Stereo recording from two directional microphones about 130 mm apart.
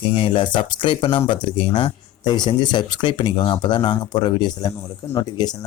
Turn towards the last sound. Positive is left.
turn(degrees=30)  # may be behind; listen again after turning